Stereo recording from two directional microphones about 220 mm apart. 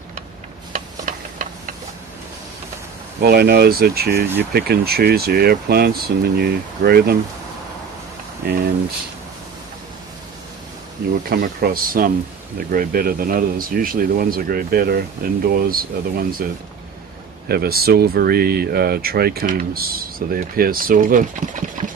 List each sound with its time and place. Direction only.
0.7 s a sound: 35° right (ahead or behind)
3.2 s speech: 45° right (ahead or behind)
8.4 s speech: 45° right (ahead or behind)
11.3 s speech: 40° right (ahead or behind)
17.5 s speech: 45° right (ahead or behind)